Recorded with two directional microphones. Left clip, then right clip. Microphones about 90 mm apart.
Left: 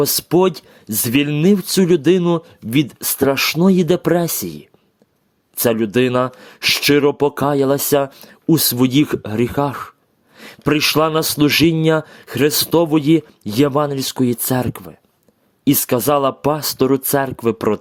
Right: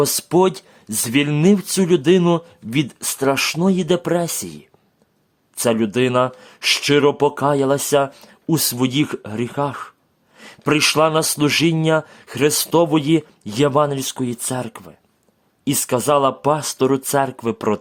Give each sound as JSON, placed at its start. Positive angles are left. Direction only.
{"t": 0.0, "sound": "speech", "side_deg": 45}
{"t": 2.2, "sound": "speech", "side_deg": 40}